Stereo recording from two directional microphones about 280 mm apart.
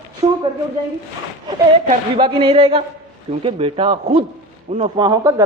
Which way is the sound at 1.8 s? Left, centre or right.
Right.